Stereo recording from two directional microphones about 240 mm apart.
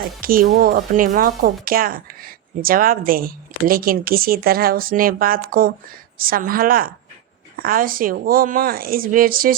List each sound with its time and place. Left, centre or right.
0.2 s speech: right